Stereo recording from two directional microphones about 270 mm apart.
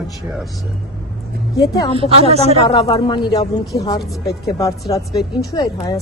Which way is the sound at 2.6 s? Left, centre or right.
Left.